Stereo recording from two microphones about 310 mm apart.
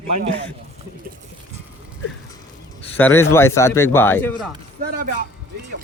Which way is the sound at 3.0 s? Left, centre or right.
Centre.